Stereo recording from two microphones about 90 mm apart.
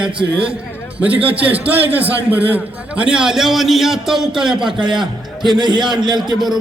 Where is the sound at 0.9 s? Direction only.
15° right (ahead or behind).